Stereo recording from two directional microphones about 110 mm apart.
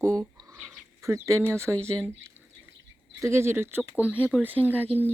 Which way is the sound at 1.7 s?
10° left (ahead or behind).